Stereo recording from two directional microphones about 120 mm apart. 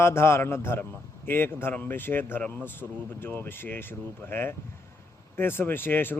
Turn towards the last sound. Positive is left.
turn(degrees=15)  # may be behind; listen again after turning